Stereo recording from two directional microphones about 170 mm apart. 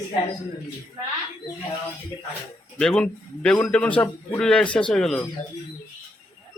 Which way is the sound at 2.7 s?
5° left (ahead or behind).